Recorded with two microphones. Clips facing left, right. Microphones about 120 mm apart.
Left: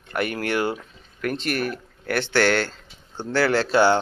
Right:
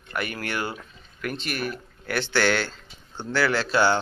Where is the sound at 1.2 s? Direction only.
55° left (ahead or behind).